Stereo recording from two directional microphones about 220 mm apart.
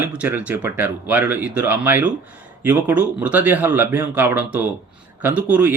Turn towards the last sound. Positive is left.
turn(degrees=-5)  # may be behind; listen again after turning